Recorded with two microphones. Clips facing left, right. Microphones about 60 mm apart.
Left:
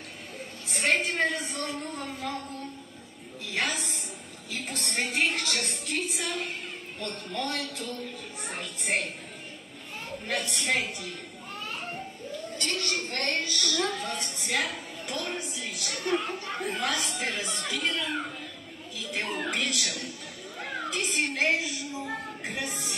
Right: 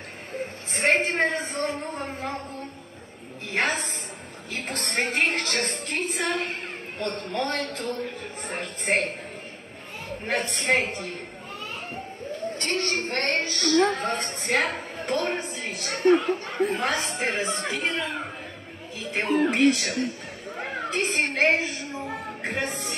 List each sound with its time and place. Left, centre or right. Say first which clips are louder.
0.3 s a sound: right 7 dB; right
4.5 s a woman's voice: right 4 dB; right
10.2 s a woman's voice: right 5 dB; right
12.3 s a woman's voice: right 5 dB; right